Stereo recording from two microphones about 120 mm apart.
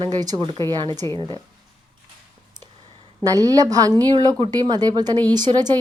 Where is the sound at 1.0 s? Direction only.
25° left (ahead or behind).